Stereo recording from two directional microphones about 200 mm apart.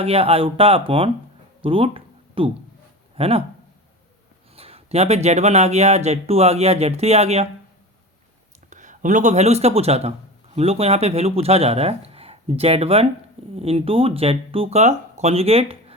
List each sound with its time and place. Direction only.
0.0 s speech: 30° right (ahead or behind)
1.6 s a sound: 25° right (ahead or behind)
3.2 s speech: 30° right (ahead or behind)
4.5 s speech: 30° right (ahead or behind)
8.7 s a man's voice: 40° right (ahead or behind)